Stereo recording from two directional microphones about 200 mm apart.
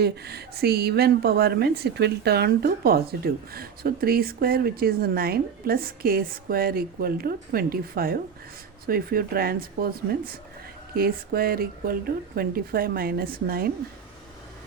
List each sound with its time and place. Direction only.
0.0 s a woman's voice: 55° right (ahead or behind)